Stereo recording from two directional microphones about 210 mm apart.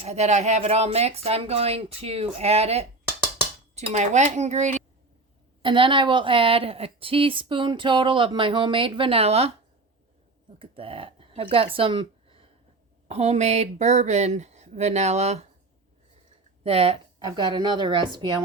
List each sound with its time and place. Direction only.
0.0 s a woman's voice: 30° right (ahead or behind)
10.6 s a woman's voice: 25° right (ahead or behind)
16.6 s a woman's voice: 25° right (ahead or behind)